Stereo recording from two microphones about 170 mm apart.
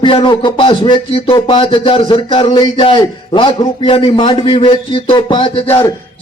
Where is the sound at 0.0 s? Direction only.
30° left (ahead or behind).